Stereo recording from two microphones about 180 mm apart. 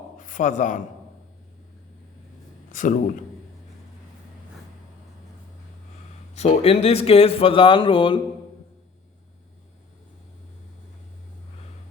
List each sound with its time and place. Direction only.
0.2 s speech: 45° left (ahead or behind)
2.7 s a man's voice: 45° left (ahead or behind)
6.3 s speech: 35° left (ahead or behind)